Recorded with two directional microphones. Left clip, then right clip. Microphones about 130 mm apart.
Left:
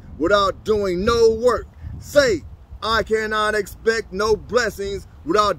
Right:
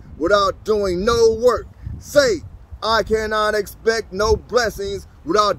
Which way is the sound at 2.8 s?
35° left (ahead or behind).